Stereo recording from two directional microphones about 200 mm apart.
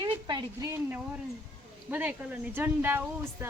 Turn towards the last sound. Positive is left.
turn(degrees=-10)  # may be behind; listen again after turning